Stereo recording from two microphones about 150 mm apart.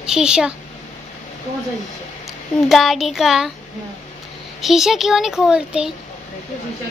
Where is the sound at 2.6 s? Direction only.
Centre (ahead or behind).